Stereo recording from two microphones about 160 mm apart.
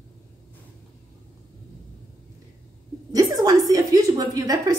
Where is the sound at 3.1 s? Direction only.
25° right (ahead or behind).